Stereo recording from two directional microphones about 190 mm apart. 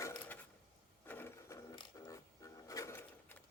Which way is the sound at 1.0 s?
10° left (ahead or behind).